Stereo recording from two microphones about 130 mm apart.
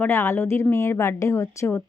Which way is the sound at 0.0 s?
20° left (ahead or behind).